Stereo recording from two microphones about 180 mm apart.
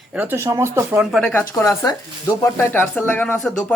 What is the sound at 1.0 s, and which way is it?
Speech, centre (ahead or behind).